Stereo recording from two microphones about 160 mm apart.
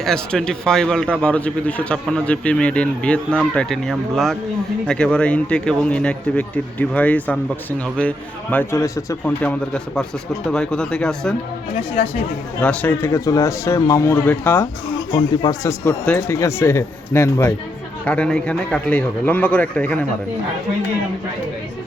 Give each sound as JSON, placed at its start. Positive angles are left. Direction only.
{"t": 0.0, "sound": "a man's voice", "side_deg": 5}
{"t": 8.7, "sound": "a man's voice", "side_deg": 20}
{"t": 12.6, "sound": "a man's voice", "side_deg": 10}